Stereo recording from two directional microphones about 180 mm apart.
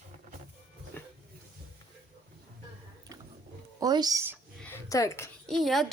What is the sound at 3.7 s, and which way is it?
Speech, 20° right (ahead or behind).